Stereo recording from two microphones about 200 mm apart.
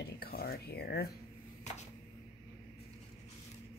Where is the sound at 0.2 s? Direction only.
50° left (ahead or behind).